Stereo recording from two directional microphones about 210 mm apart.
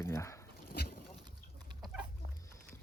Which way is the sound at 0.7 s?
45° left (ahead or behind).